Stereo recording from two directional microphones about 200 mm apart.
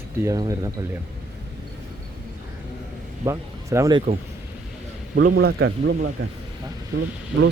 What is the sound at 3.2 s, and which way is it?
Speech, 15° right (ahead or behind).